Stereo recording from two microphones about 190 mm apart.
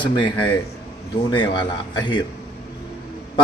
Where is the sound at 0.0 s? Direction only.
25° left (ahead or behind).